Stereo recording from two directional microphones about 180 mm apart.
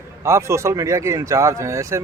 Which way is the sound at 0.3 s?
15° right (ahead or behind).